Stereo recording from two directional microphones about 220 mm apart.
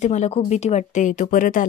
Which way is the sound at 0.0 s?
30° left (ahead or behind).